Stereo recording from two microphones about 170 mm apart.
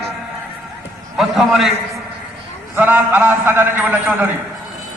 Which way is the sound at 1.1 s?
Centre (ahead or behind).